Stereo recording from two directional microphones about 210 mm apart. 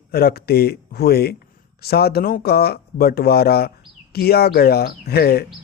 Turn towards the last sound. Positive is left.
turn(degrees=50)  # may be behind; listen again after turning